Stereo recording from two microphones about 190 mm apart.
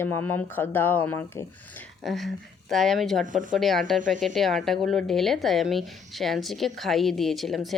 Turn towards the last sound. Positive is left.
turn(degrees=0)  # may be behind; listen again after turning